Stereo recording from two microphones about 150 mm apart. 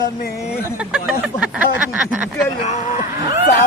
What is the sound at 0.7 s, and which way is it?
Speech, 5° right (ahead or behind).